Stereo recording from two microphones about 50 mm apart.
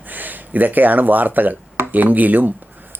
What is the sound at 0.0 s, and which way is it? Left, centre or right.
Speech, right.